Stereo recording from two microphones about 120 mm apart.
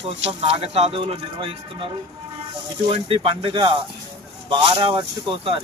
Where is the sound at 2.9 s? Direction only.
50° right (ahead or behind).